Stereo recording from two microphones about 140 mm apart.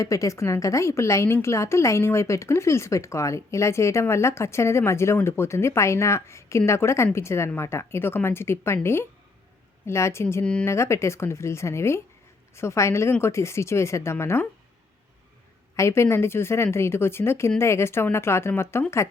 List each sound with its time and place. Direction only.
0.0 s a woman's voice: 20° left (ahead or behind)
10.4 s speech: 5° left (ahead or behind)
10.7 s a woman's voice: 20° left (ahead or behind)
15.7 s a woman's voice: 20° left (ahead or behind)